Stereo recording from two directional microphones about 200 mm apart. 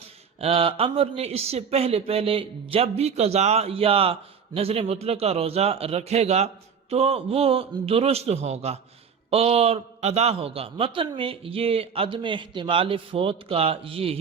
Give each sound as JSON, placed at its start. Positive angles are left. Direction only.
{"t": 0.3, "sound": "a man's voice", "side_deg": -30}